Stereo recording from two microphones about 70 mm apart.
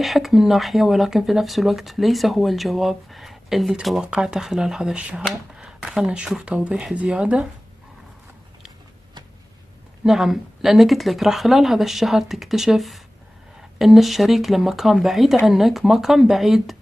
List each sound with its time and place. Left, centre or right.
0.0 s speech: centre
4.0 s speech: centre
4.9 s speech: centre
10.0 s speech: centre